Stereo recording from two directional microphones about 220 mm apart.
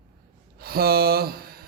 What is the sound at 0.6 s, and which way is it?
Speech, 45° right (ahead or behind).